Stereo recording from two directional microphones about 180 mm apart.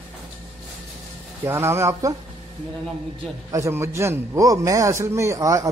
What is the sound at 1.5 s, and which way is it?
Speech, 15° right (ahead or behind).